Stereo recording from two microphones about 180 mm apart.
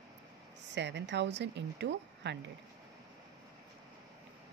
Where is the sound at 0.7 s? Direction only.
75° right (ahead or behind).